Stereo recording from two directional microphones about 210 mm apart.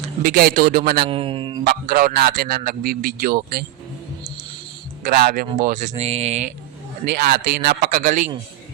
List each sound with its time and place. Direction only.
0.2 s a man's voice: 45° right (ahead or behind)
1.0 s speech: 25° right (ahead or behind)
1.6 s a man's voice: 45° right (ahead or behind)
5.0 s speech: 45° right (ahead or behind)
7.0 s a man's voice: 50° right (ahead or behind)